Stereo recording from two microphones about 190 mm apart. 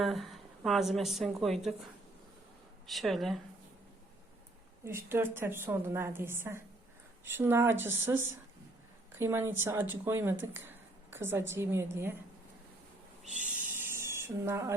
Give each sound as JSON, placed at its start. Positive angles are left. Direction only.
{"t": 0.0, "sound": "a woman's voice", "side_deg": 0}
{"t": 4.9, "sound": "speech", "side_deg": -10}
{"t": 9.1, "sound": "speech", "side_deg": -10}
{"t": 13.2, "sound": "owl", "side_deg": -40}
{"t": 13.5, "sound": "a sound", "side_deg": -10}